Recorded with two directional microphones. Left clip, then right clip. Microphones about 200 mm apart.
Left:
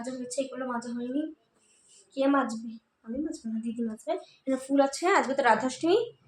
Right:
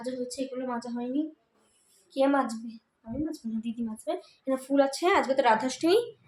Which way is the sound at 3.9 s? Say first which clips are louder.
Left 1 dB; centre (ahead or behind).